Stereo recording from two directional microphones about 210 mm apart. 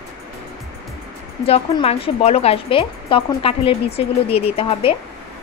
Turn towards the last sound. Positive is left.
turn(degrees=25)  # may be behind; listen again after turning